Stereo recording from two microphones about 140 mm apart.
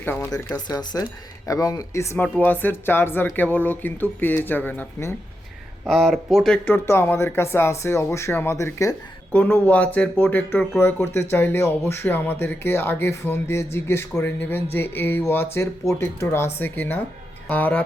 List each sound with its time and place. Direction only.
0.0 s speech: 15° left (ahead or behind)
0.7 s speech: 30° left (ahead or behind)
5.8 s speech: centre (ahead or behind); by 9.0 s 20° left (ahead or behind)
9.3 s speech: 10° left (ahead or behind)